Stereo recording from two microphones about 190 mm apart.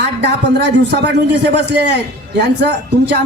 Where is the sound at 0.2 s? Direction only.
65° right (ahead or behind).